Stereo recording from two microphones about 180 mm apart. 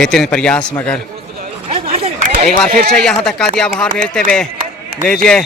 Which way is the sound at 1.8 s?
35° right (ahead or behind).